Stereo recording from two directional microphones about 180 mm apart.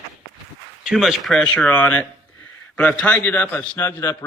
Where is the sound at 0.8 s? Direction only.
Centre (ahead or behind).